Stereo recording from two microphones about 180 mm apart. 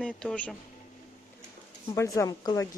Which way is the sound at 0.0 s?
5° left (ahead or behind).